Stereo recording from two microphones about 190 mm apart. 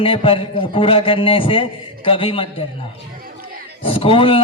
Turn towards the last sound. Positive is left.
turn(degrees=30)  # may be behind; listen again after turning